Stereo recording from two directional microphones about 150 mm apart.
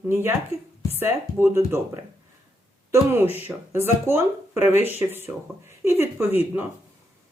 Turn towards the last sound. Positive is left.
turn(degrees=-15)  # may be behind; listen again after turning